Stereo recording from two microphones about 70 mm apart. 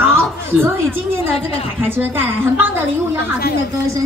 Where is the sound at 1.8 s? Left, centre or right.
Right.